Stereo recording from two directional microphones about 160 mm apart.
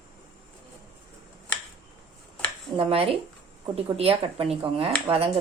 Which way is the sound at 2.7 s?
35° right (ahead or behind).